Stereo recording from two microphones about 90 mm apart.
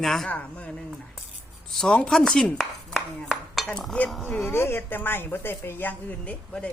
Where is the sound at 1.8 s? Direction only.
10° left (ahead or behind).